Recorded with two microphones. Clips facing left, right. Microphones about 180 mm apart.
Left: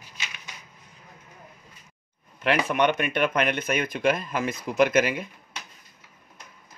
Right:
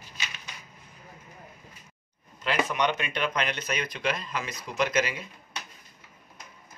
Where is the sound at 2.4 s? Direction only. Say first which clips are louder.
Left 4 dB; 60° left (ahead or behind).